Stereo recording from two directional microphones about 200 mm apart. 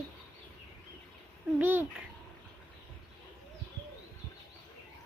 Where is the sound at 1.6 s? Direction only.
10° right (ahead or behind).